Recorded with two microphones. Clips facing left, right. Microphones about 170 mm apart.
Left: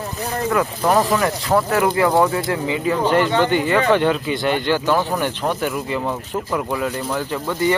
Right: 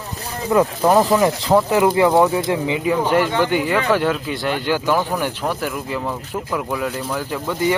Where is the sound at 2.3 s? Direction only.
20° right (ahead or behind).